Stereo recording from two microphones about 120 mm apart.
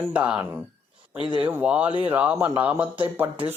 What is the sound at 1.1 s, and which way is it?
Speech, 45° right (ahead or behind).